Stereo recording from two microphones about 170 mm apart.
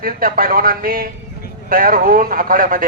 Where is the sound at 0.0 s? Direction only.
55° right (ahead or behind).